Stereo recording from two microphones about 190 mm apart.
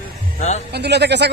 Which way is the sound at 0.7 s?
60° right (ahead or behind).